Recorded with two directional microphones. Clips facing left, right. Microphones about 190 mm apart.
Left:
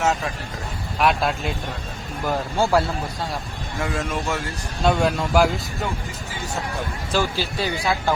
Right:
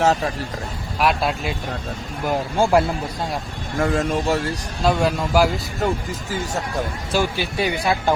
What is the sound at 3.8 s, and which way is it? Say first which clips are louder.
Speech: right 6 dB; 40° right (ahead or behind).